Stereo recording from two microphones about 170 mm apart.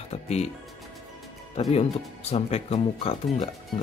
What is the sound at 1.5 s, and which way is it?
Speech, 35° left (ahead or behind).